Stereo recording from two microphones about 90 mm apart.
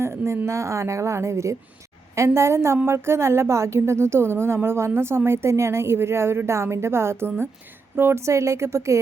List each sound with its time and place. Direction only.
0.0 s a woman's voice: 30° right (ahead or behind)